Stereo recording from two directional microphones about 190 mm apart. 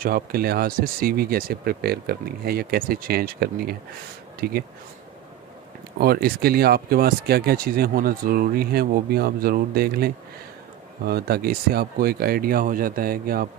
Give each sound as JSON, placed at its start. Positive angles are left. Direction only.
{"t": 0.0, "sound": "speech", "side_deg": -50}
{"t": 5.9, "sound": "speech", "side_deg": -55}